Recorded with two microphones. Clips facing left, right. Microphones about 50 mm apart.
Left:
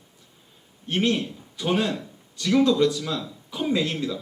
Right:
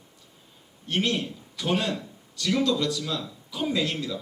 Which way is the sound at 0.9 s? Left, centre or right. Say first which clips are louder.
Left 3 dB; left.